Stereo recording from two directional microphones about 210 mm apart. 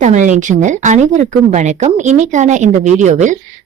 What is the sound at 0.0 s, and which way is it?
Speech, 35° right (ahead or behind).